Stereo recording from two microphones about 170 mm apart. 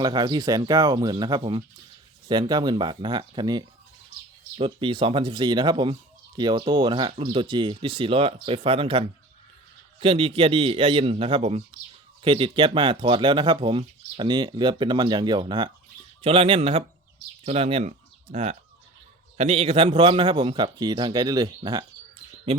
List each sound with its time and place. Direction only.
0.0 s a man's voice: 25° right (ahead or behind)